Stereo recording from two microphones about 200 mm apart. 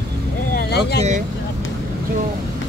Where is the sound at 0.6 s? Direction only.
55° left (ahead or behind).